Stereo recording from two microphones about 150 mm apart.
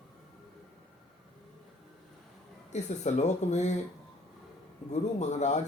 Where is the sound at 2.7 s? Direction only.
50° left (ahead or behind).